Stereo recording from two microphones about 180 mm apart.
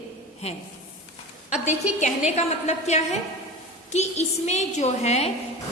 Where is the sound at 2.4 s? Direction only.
35° left (ahead or behind).